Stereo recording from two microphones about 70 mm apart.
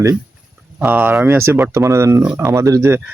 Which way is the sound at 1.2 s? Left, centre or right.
Right.